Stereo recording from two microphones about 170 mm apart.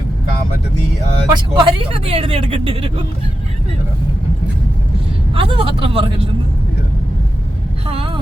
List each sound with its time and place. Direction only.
1.3 s speech: 25° right (ahead or behind)
5.3 s speech: 30° right (ahead or behind)
7.9 s vehicle: 30° right (ahead or behind)